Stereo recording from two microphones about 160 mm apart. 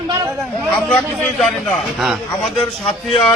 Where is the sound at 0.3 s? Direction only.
Centre (ahead or behind).